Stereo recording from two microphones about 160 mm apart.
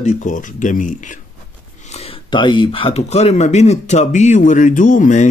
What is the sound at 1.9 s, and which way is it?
Speech, 35° left (ahead or behind).